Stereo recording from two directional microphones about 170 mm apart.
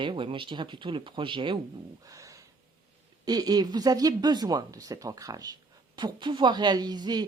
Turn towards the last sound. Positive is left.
turn(degrees=-25)  # may be behind; listen again after turning